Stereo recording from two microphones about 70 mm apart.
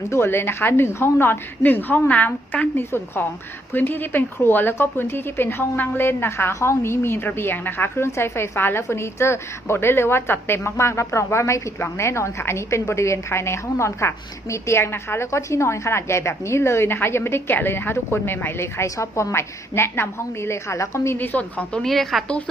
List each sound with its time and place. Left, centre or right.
0.1 s a woman's voice: left
21.2 s a woman's voice: left
21.8 s a woman's voice: centre